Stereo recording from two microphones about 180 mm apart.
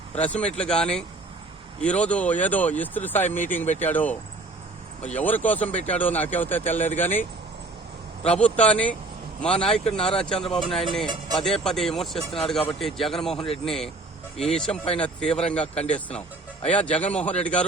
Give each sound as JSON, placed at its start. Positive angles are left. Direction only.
{"t": 0.2, "sound": "speech", "side_deg": 5}
{"t": 15.6, "sound": "speech", "side_deg": 35}
{"t": 15.9, "sound": "speech", "side_deg": 5}